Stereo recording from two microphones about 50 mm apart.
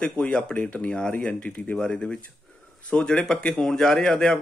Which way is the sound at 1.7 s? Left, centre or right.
Centre.